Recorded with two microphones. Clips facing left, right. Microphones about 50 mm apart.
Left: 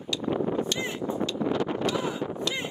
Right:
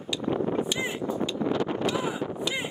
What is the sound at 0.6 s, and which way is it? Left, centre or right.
Vehicle, centre.